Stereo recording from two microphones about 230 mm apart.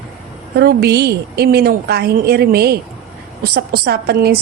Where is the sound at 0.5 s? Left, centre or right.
Right.